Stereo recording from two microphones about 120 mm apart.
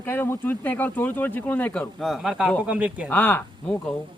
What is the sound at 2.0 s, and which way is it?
Speech, centre (ahead or behind).